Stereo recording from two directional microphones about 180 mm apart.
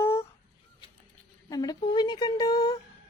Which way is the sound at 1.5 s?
20° left (ahead or behind).